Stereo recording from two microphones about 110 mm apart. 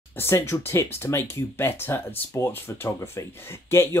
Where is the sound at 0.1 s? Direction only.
20° left (ahead or behind).